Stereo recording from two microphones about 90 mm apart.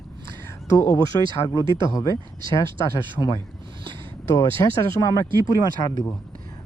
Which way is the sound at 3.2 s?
20° left (ahead or behind).